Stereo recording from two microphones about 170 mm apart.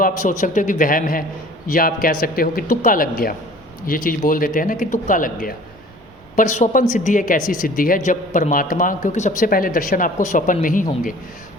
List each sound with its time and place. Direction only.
0.0 s a man's voice: 50° left (ahead or behind)